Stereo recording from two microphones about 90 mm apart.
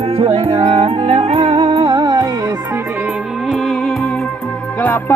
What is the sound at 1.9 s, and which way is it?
Music, 55° right (ahead or behind).